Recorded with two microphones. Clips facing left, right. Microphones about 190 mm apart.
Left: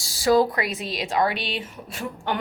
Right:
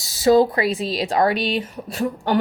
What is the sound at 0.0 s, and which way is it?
Speech, 25° right (ahead or behind).